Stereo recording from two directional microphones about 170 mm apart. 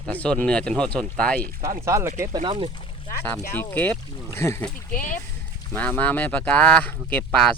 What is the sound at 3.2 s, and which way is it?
Speech, 10° left (ahead or behind).